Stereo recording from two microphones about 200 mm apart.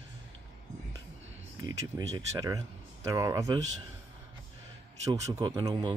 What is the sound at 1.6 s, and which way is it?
Speech, 20° right (ahead or behind).